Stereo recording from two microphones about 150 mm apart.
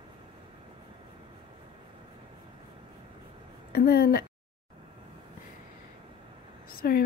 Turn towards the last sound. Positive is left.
turn(degrees=85)